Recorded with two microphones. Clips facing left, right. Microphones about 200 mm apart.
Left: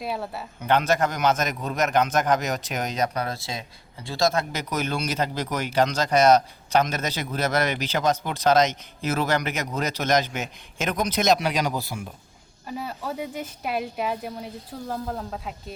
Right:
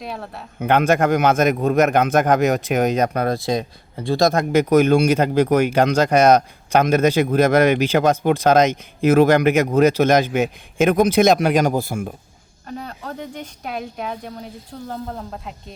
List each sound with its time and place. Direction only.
0.0 s speech: 5° left (ahead or behind)
0.6 s speech: 55° right (ahead or behind)
12.6 s speech: 5° left (ahead or behind)